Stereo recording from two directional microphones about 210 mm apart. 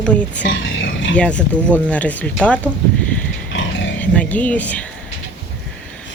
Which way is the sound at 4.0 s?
5° left (ahead or behind).